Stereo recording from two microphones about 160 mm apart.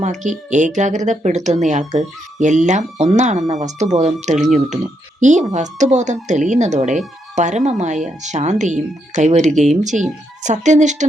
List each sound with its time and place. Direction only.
0.0 s speech: 50° right (ahead or behind)